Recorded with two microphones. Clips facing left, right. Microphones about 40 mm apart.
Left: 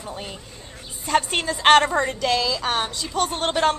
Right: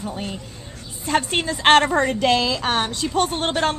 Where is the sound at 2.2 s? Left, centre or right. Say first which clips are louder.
Right 3 dB; right.